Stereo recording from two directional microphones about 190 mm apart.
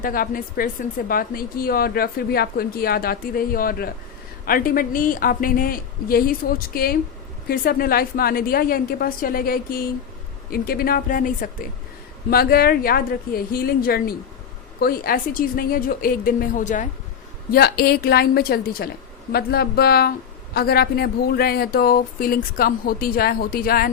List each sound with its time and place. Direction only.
0.0 s speech: 50° left (ahead or behind)
17.5 s speech: 55° left (ahead or behind)